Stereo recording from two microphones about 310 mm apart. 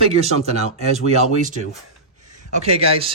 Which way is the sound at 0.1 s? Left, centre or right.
Right.